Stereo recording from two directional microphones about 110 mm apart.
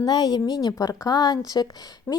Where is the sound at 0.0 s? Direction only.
35° left (ahead or behind).